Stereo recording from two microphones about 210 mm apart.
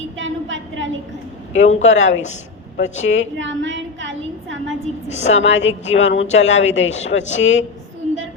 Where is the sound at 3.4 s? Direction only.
60° right (ahead or behind).